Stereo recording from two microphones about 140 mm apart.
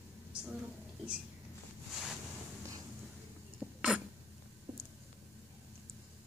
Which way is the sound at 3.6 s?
5° right (ahead or behind).